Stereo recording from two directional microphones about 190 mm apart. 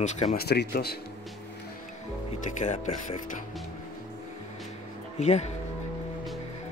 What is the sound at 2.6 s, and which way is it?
Speech, 40° left (ahead or behind).